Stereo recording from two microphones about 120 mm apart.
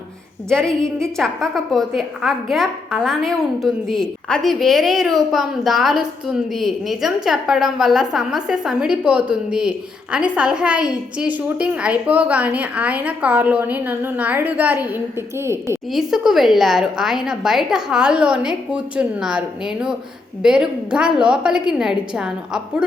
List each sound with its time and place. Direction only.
0.5 s a woman's voice: 5° left (ahead or behind); by 15.8 s 25° right (ahead or behind)
15.9 s a woman's voice: 5° right (ahead or behind)